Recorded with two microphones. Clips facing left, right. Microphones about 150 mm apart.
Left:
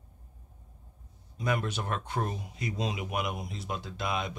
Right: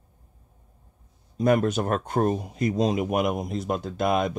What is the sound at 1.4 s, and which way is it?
Speech, 45° right (ahead or behind).